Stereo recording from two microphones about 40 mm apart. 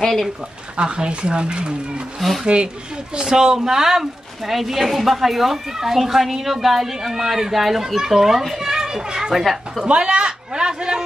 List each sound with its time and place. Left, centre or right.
0.0 s speech: centre
0.7 s speech: right
2.1 s speech: centre
2.4 s speech: right
3.2 s speech: centre
9.4 s a woman's voice: centre
9.8 s speech: right